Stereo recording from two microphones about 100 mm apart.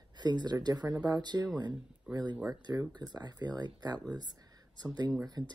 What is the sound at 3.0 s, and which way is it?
Speech, 45° right (ahead or behind).